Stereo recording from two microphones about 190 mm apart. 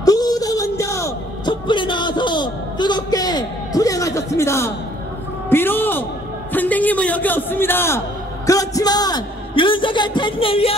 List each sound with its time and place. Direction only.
0.0 s music: 20° left (ahead or behind)
6.5 s a man's voice: 10° left (ahead or behind); by 10.7 s 30° left (ahead or behind)